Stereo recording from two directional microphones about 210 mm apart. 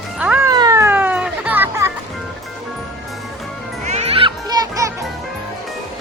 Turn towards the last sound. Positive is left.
turn(degrees=-15)  # may be behind; listen again after turning